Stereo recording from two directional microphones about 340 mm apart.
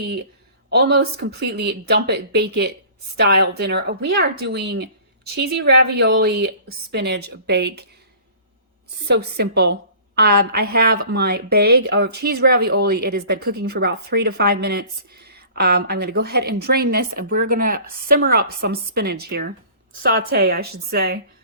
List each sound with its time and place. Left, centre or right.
0.0 s a woman's voice: right
9.0 s a woman's voice: right